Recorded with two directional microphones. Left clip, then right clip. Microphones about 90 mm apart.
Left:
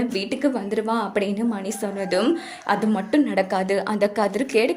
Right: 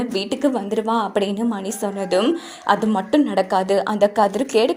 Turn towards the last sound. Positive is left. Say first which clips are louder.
# right 3 dB
turn(degrees=-30)  # may be behind; listen again after turning